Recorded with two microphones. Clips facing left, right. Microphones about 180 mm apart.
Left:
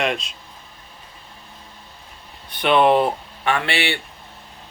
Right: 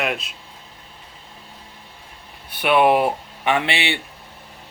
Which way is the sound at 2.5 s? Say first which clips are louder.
Even; 10° right (ahead or behind).